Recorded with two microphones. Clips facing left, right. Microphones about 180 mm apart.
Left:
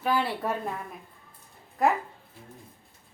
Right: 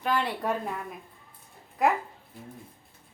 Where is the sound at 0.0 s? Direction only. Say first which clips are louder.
Left 1 dB; 5° left (ahead or behind).